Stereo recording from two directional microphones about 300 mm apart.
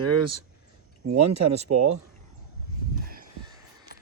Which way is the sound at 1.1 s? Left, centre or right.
Right.